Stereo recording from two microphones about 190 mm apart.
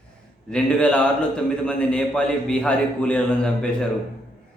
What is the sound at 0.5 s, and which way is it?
A man's voice, 5° left (ahead or behind).